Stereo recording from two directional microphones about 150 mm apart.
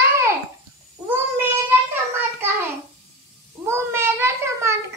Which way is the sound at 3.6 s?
15° right (ahead or behind).